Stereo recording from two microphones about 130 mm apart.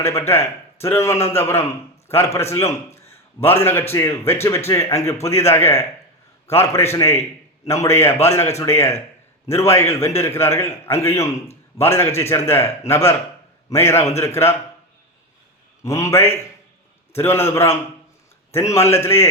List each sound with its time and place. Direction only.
0.0 s a man's voice: 20° left (ahead or behind)
15.8 s a man's voice: 25° left (ahead or behind)